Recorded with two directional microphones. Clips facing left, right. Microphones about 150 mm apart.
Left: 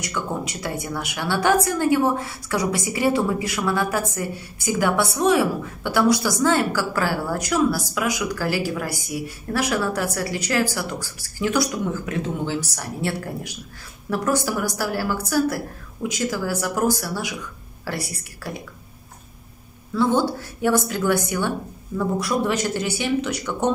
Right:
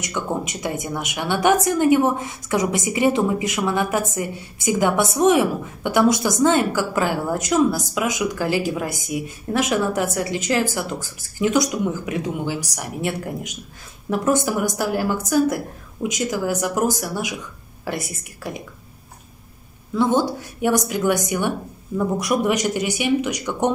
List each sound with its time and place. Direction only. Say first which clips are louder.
0.0 s a woman's voice: right 2 dB; 20° right (ahead or behind)
19.9 s a woman's voice: right 1 dB; 15° right (ahead or behind)